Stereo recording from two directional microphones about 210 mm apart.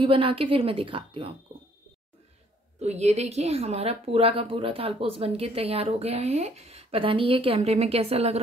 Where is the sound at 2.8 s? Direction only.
30° right (ahead or behind).